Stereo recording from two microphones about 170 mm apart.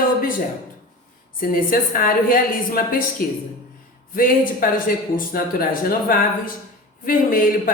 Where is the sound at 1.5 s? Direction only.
55° left (ahead or behind).